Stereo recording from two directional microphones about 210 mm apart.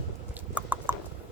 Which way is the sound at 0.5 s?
10° right (ahead or behind).